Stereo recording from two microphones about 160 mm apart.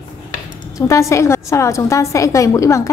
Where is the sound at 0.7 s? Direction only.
20° left (ahead or behind).